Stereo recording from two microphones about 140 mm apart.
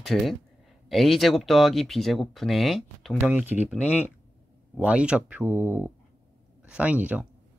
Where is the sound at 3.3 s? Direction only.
15° right (ahead or behind).